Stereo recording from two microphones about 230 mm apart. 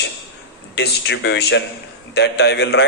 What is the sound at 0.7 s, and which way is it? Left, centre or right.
A man's voice, left.